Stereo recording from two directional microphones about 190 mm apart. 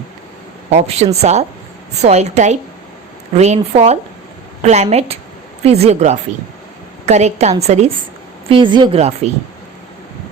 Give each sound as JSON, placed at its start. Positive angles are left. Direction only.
{"t": 0.7, "sound": "a woman's voice", "side_deg": -35}